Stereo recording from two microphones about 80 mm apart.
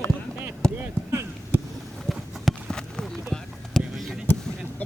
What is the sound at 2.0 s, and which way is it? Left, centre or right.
Run, centre.